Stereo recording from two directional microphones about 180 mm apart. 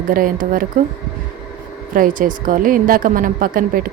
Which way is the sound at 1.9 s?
50° right (ahead or behind).